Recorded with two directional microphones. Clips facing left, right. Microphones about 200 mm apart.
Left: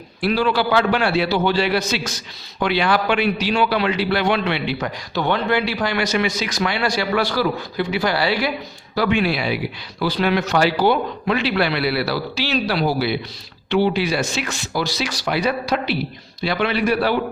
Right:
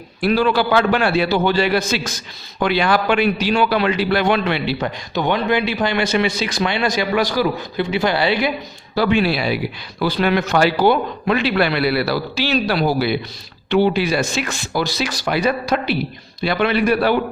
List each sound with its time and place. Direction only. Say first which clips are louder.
0.2 s a man's voice: right 2 dB; 50° right (ahead or behind); by 4.9 s 35° right (ahead or behind)
5.1 s speech: right 1 dB; 15° right (ahead or behind)
9.0 s speech: right 2 dB; 35° right (ahead or behind)
10.0 s a man's voice: right 2 dB; 55° right (ahead or behind)